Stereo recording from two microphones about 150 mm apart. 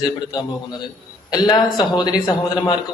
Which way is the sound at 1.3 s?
30° left (ahead or behind).